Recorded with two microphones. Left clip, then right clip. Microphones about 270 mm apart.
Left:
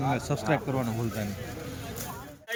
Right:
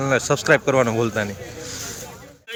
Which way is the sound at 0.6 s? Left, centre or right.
Right.